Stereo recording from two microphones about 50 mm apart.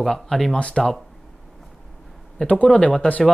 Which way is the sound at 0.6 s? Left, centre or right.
Left.